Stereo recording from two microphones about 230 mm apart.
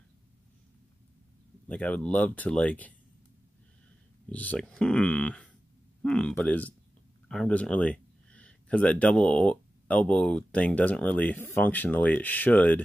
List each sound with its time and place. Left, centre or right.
1.7 s speech: centre
4.3 s speech: centre